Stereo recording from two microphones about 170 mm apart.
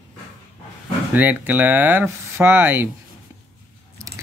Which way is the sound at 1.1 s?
10° right (ahead or behind).